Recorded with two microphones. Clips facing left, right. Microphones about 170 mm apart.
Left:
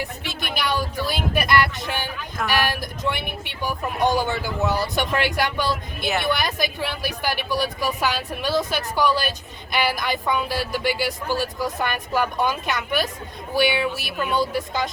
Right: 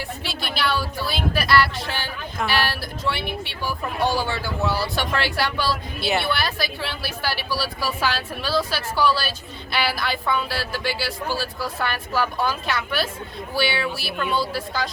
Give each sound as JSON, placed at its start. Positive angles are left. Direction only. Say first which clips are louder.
{"t": 0.4, "sound": "speech", "louder": "even", "side_deg": 15}
{"t": 14.3, "sound": "a woman's voice", "louder": "left 4 dB", "side_deg": 20}